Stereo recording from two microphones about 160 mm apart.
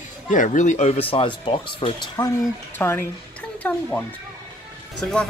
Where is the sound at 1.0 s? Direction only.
35° left (ahead or behind).